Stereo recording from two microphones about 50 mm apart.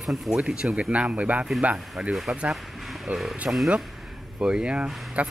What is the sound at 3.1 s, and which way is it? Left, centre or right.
Speech, right.